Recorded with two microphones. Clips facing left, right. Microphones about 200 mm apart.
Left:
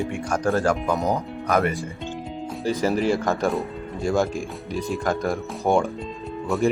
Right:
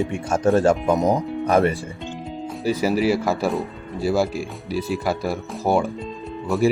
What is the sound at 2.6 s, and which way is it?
Speech, 10° right (ahead or behind).